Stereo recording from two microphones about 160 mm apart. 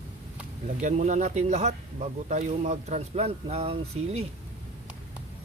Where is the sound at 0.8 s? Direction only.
50° right (ahead or behind).